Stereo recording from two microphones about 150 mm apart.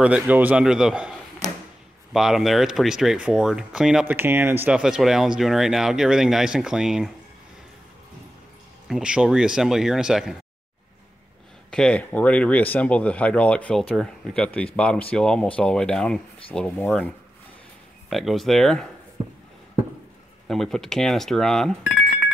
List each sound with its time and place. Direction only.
0.0 s a man's voice: 10° right (ahead or behind)
2.1 s speech: centre (ahead or behind)
8.8 s speech: 5° right (ahead or behind)
11.7 s speech: 5° left (ahead or behind)
18.1 s speech: centre (ahead or behind)
20.4 s speech: 5° left (ahead or behind)